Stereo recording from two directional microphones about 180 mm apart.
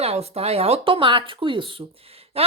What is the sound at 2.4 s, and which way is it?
Gasp, 35° right (ahead or behind).